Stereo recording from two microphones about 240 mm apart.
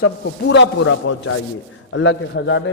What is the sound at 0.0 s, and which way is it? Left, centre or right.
A man's voice, left.